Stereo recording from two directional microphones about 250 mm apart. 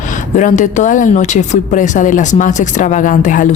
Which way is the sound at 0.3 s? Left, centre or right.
Left.